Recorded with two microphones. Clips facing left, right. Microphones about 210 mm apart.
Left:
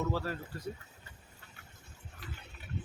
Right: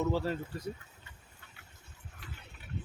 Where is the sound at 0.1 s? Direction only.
20° right (ahead or behind).